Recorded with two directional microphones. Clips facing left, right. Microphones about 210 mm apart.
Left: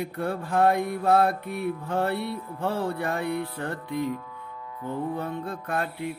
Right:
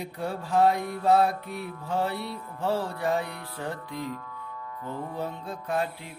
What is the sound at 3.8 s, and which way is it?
Music, 10° left (ahead or behind).